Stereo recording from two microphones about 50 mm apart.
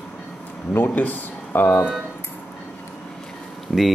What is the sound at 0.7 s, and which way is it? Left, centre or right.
Speech, left.